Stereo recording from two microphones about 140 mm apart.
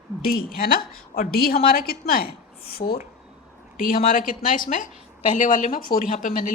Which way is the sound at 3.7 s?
80° left.